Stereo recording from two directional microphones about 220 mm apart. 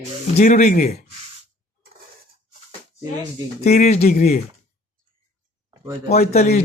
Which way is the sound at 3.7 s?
30° left (ahead or behind).